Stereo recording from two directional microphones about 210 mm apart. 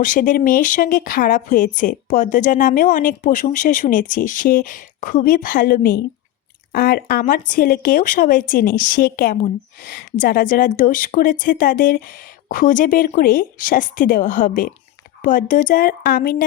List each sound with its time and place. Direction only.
0.0 s a woman's voice: 40° left (ahead or behind)